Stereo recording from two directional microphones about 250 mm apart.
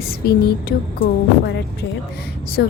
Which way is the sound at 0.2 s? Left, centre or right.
Left.